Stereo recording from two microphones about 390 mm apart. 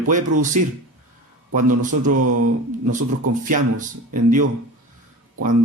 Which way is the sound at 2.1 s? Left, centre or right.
Right.